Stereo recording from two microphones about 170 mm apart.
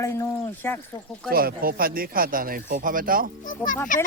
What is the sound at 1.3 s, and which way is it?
Speech, 60° right (ahead or behind).